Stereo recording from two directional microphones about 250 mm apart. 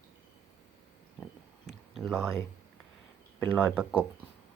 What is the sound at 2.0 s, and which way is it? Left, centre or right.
Speech, centre.